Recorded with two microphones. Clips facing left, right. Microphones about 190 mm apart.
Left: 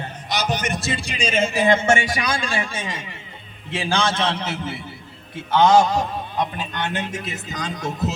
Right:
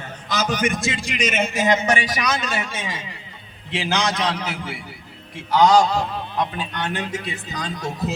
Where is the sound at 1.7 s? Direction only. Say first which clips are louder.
Left 2 dB; 25° left (ahead or behind).